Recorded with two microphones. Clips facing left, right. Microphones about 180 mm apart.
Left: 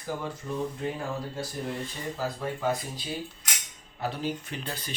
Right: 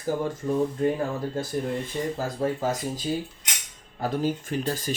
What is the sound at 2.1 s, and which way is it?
Speech, 45° right (ahead or behind).